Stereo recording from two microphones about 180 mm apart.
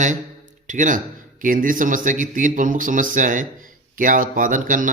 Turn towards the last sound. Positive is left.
turn(degrees=-45)  # may be behind; listen again after turning